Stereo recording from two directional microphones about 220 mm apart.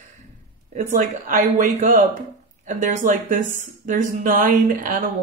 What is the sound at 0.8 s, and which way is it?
Speech, 35° right (ahead or behind).